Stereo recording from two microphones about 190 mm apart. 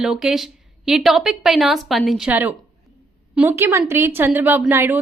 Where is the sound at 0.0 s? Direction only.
5° right (ahead or behind).